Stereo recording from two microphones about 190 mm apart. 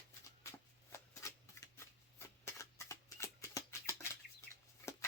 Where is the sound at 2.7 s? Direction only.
15° left (ahead or behind).